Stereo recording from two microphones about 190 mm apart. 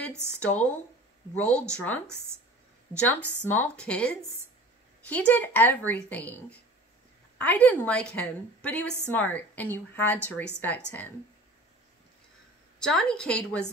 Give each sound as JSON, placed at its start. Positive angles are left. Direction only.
{"t": 0.1, "sound": "speech", "side_deg": -15}
{"t": 0.4, "sound": "a woman's voice", "side_deg": 5}
{"t": 7.3, "sound": "a woman's voice", "side_deg": 10}
{"t": 12.7, "sound": "a woman's voice", "side_deg": 5}